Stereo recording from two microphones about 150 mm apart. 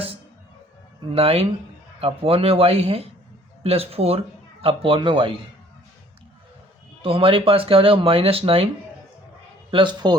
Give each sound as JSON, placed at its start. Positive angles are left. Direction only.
{"t": 1.1, "sound": "speech", "side_deg": -40}
{"t": 7.0, "sound": "speech", "side_deg": -40}
{"t": 9.7, "sound": "speech", "side_deg": -30}